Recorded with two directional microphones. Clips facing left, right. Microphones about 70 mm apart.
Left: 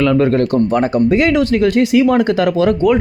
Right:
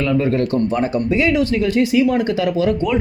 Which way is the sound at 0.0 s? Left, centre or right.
Left.